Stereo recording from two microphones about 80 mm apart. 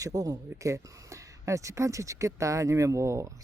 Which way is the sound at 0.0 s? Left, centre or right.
Right.